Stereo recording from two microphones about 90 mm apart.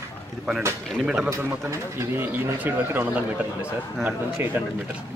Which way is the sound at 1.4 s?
25° right (ahead or behind).